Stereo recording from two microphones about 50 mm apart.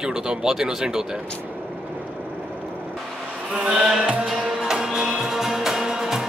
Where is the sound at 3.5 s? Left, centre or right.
Centre.